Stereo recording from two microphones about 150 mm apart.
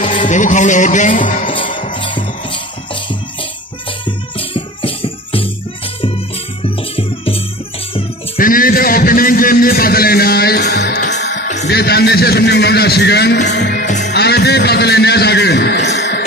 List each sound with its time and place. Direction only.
0.1 s music: 55° left (ahead or behind)
1.9 s music: 35° left (ahead or behind)
4.0 s music: 35° left (ahead or behind)
6.6 s music: 40° left (ahead or behind)
8.4 s a sound: 70° left (ahead or behind); by 11.1 s 90° left
11.7 s a man's voice: 90° left
13.8 s music: 55° left (ahead or behind)
14.1 s a sound: 90° left